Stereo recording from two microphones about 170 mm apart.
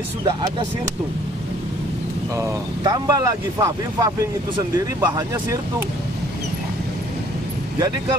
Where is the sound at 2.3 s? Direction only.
20° right (ahead or behind).